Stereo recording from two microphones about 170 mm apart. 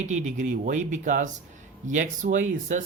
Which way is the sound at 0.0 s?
45° right (ahead or behind).